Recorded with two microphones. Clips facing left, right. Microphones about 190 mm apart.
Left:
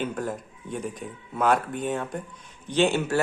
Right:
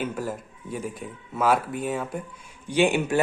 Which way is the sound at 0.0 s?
5° right (ahead or behind).